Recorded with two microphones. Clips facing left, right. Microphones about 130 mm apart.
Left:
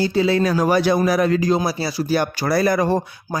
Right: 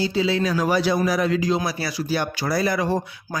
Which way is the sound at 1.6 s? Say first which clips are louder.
Left 4 dB; 30° left (ahead or behind).